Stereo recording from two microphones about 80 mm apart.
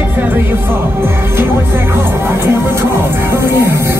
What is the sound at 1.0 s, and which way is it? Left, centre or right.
Music, right.